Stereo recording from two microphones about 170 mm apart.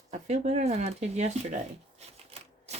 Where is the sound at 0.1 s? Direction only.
45° right (ahead or behind).